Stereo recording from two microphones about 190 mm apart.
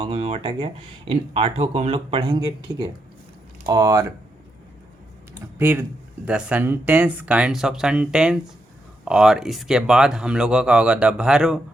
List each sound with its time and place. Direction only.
0.0 s speech: 30° right (ahead or behind)
5.5 s speech: 10° right (ahead or behind)